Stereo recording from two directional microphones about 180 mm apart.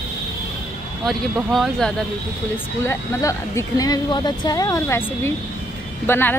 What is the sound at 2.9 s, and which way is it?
Speech, 15° left (ahead or behind).